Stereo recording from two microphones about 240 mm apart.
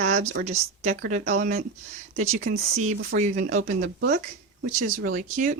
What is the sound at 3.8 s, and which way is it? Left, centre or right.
A woman's voice, right.